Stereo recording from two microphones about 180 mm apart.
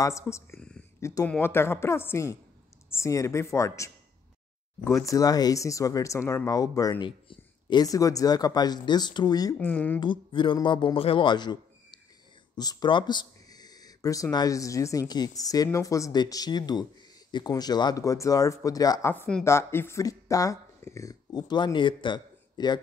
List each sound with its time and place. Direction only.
0.0 s speech: 15° left (ahead or behind)
0.6 s a sound: 5° left (ahead or behind)
1.0 s speech: 15° left (ahead or behind)
9.6 s speech: 10° left (ahead or behind)
9.9 s a man's voice: 25° left (ahead or behind)